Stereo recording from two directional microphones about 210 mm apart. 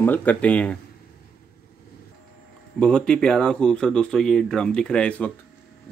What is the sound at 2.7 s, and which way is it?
Speech, 5° left (ahead or behind).